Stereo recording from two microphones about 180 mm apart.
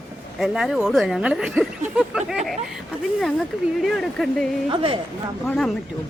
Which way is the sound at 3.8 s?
Centre (ahead or behind).